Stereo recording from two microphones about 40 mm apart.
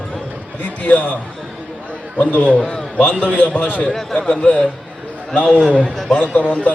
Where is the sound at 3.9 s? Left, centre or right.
Centre.